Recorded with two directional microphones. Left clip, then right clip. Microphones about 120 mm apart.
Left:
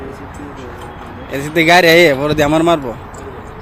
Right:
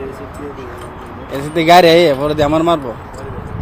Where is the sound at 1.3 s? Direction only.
20° left (ahead or behind).